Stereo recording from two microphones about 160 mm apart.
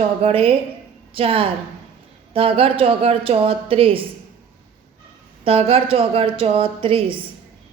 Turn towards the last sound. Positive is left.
turn(degrees=-35)  # may be behind; listen again after turning